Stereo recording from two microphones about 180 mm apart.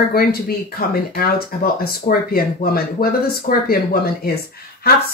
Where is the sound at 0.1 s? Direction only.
55° left (ahead or behind).